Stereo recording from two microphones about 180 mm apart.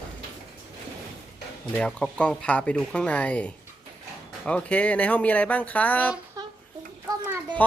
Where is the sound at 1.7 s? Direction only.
5° left (ahead or behind).